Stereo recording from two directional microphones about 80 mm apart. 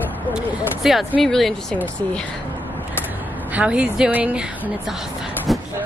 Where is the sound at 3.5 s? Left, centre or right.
Centre.